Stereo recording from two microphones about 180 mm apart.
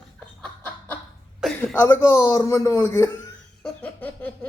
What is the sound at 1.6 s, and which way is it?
A woman's voice, 10° left (ahead or behind).